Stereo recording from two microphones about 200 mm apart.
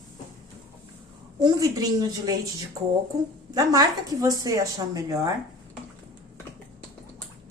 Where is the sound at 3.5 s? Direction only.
20° right (ahead or behind).